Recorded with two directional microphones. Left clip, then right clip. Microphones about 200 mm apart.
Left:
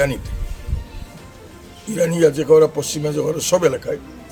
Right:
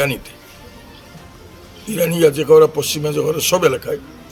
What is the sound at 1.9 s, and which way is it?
A man's voice, centre (ahead or behind).